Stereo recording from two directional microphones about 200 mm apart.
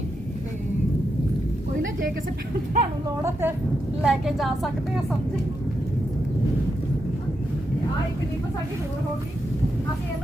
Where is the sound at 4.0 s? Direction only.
Centre (ahead or behind).